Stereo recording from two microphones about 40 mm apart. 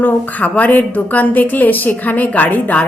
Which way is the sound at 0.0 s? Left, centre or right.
Left.